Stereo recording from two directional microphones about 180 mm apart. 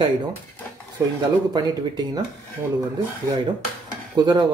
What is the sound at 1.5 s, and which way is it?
Speech, 20° right (ahead or behind).